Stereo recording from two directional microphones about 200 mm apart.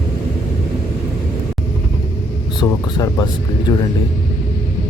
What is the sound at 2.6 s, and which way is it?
Speech, 20° left (ahead or behind).